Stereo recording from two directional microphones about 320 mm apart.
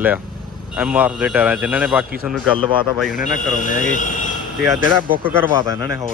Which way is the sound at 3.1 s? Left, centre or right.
Left.